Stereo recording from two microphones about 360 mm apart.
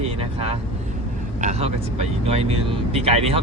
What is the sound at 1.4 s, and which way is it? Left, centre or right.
Speech, centre.